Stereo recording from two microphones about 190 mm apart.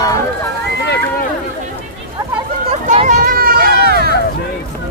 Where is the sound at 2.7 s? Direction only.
35° right (ahead or behind); by 4.1 s 55° right (ahead or behind).